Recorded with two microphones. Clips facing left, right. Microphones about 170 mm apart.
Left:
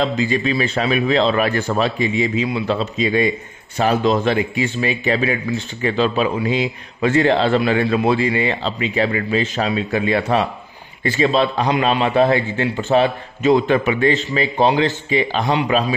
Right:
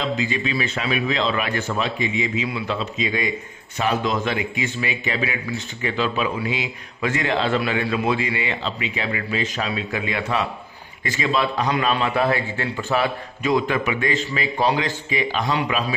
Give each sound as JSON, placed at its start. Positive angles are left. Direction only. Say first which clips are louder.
{"t": 0.0, "sound": "a man's voice", "louder": "left 5 dB", "side_deg": 40}